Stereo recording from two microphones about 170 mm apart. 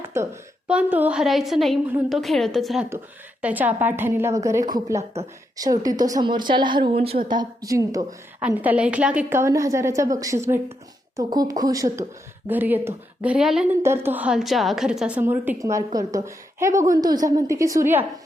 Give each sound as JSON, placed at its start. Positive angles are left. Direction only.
{"t": 0.1, "sound": "a woman's voice", "side_deg": -15}
{"t": 7.3, "sound": "a woman's voice", "side_deg": -25}
{"t": 8.4, "sound": "a woman's voice", "side_deg": -10}